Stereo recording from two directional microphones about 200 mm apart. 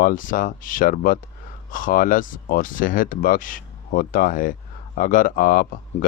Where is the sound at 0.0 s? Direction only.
45° left (ahead or behind).